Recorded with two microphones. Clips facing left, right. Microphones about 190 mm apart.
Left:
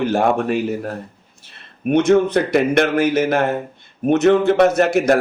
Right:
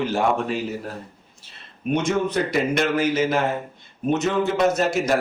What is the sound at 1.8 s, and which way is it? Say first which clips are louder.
A man's voice: left 8 dB; 60° left (ahead or behind).